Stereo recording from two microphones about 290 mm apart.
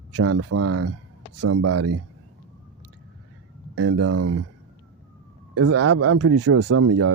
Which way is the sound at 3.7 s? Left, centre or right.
Right.